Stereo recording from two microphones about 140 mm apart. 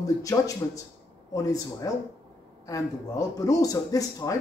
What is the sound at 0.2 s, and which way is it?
Speech, 25° left (ahead or behind).